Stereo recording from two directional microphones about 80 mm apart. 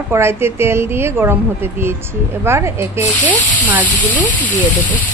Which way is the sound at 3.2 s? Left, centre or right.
Centre.